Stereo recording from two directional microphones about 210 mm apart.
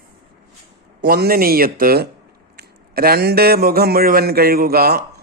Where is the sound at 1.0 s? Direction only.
45° right (ahead or behind).